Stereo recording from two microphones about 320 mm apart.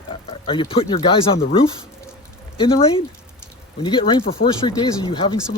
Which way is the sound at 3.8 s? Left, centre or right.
Centre.